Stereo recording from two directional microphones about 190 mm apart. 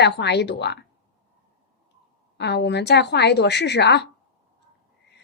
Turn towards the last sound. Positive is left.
turn(degrees=60)  # may be behind; listen again after turning